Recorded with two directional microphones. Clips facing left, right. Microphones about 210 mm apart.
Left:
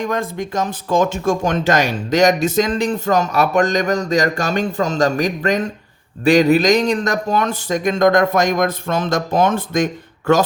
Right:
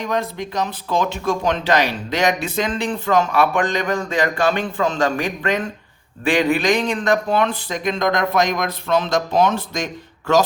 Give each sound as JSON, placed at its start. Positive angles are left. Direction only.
{"t": 0.0, "sound": "speech", "side_deg": 50}